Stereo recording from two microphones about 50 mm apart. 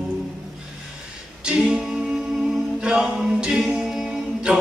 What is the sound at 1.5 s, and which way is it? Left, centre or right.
A capella, centre.